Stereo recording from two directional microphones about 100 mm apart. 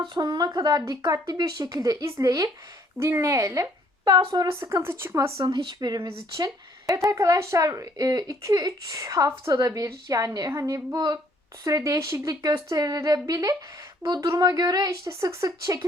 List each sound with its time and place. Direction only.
0.1 s speech: 40° right (ahead or behind)
4.6 s speech: 25° right (ahead or behind)
5.4 s speech: 45° right (ahead or behind)